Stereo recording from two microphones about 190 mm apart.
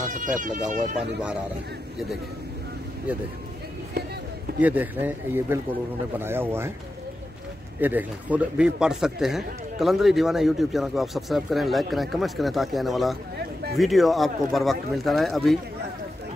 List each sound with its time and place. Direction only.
0.4 s speech: 40° right (ahead or behind)
0.7 s a man's voice: 5° right (ahead or behind)
4.6 s speech: 10° right (ahead or behind)
7.8 s a man's voice: 10° right (ahead or behind)